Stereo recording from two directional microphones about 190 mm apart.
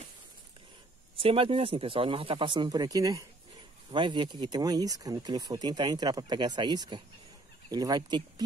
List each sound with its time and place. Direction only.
1.1 s speech: 30° right (ahead or behind)